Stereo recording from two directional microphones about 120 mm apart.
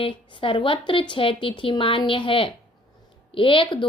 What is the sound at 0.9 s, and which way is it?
Speech, 45° left (ahead or behind).